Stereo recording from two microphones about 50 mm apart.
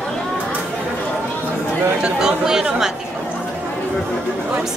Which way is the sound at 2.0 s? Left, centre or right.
Centre.